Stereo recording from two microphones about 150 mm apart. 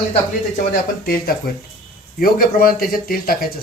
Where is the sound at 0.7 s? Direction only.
85° left.